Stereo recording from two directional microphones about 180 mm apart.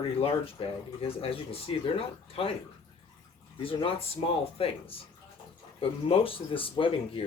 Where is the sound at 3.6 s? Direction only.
30° left (ahead or behind).